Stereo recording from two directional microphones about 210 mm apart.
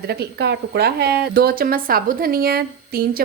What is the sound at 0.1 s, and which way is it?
Speech, 50° right (ahead or behind).